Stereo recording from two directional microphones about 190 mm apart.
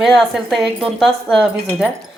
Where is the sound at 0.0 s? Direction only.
Centre (ahead or behind).